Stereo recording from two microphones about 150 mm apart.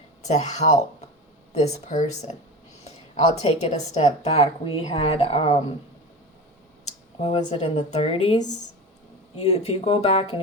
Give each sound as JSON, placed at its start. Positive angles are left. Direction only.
{"t": 0.2, "sound": "a woman's voice", "side_deg": 50}
{"t": 7.2, "sound": "a woman's voice", "side_deg": 40}